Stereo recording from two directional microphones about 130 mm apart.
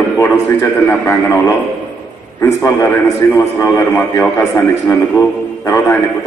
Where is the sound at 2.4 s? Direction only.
25° left (ahead or behind).